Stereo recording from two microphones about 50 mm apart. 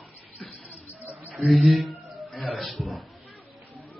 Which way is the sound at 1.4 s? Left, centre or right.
Centre.